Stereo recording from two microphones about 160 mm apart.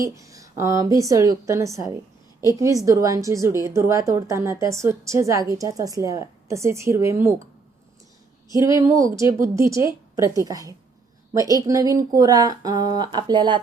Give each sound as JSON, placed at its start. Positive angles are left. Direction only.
{"t": 0.0, "sound": "a woman's voice", "side_deg": -20}
{"t": 8.5, "sound": "a woman's voice", "side_deg": -20}